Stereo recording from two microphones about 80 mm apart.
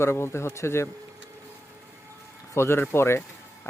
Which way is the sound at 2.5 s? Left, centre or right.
Left.